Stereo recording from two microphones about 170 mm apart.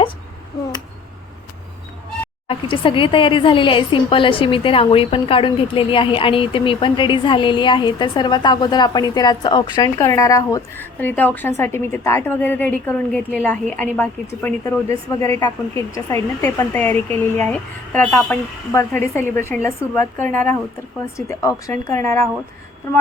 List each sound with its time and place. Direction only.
2.5 s a woman's voice: 30° left (ahead or behind)